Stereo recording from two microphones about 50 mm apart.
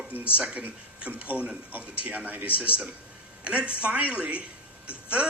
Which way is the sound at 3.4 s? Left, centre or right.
Right.